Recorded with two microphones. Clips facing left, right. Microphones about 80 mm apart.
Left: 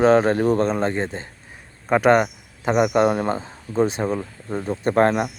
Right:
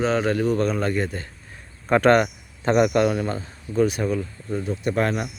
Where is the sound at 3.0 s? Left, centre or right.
Left.